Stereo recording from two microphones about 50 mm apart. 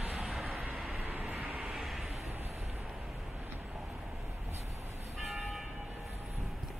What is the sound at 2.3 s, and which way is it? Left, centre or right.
Vehicle, right.